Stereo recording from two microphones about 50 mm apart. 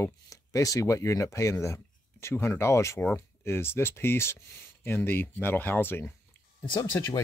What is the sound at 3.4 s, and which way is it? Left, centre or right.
Speech, left.